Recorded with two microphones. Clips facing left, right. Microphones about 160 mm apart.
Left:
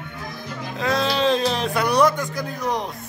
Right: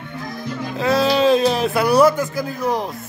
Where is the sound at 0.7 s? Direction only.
5° right (ahead or behind).